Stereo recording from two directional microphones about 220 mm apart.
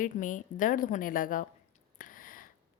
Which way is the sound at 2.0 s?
40° left (ahead or behind).